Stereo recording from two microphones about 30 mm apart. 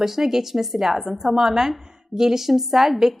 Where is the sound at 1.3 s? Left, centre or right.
Centre.